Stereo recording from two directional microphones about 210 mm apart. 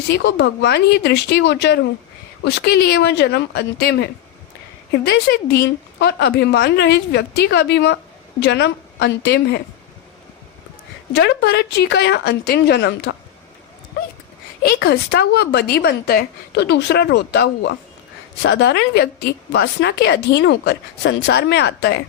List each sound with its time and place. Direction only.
0.1 s a woman's voice: 55° left (ahead or behind)
11.1 s a woman's voice: 55° left (ahead or behind)
14.6 s a woman's voice: 50° left (ahead or behind)